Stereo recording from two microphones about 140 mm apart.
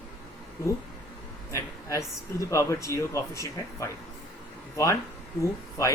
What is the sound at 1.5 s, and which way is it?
Speech, 25° left (ahead or behind).